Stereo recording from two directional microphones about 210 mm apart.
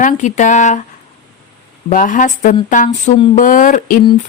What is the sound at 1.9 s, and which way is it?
Speech, 40° left (ahead or behind).